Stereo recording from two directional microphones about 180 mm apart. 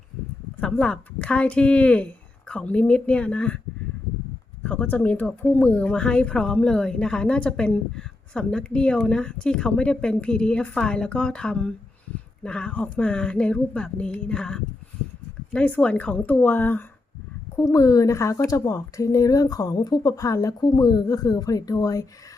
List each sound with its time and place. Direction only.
0.6 s a woman's voice: 5° left (ahead or behind)
4.6 s a woman's voice: 10° left (ahead or behind)